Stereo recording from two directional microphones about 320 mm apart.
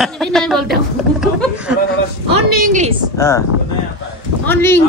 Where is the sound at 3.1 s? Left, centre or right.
Centre.